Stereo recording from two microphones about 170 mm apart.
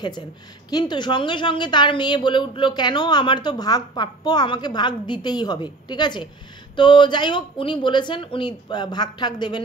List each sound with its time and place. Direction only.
0.7 s a woman's voice: 25° left (ahead or behind)